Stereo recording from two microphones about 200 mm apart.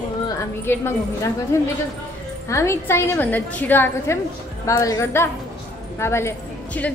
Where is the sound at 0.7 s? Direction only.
10° left (ahead or behind).